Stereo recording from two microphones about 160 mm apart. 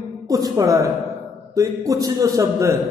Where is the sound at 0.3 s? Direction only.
20° right (ahead or behind).